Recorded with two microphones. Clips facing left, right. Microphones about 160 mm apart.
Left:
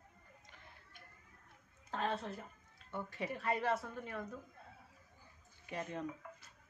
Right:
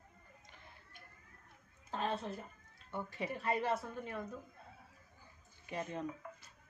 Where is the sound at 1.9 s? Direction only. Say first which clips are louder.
Right 1 dB; 20° right (ahead or behind).